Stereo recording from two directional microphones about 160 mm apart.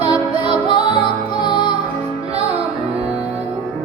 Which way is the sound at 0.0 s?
40° right (ahead or behind).